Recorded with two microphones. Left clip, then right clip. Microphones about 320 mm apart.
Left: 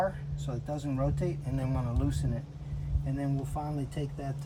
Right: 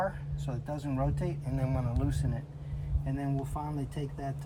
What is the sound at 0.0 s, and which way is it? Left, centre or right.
Speech, centre.